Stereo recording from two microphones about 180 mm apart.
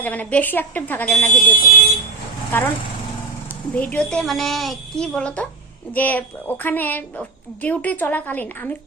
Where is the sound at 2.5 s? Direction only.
10° left (ahead or behind).